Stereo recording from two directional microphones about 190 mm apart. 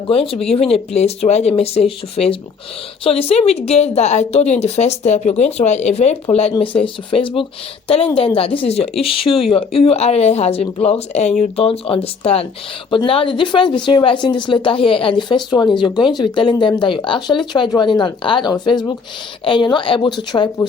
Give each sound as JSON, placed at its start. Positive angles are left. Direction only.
{"t": 0.1, "sound": "speech", "side_deg": 30}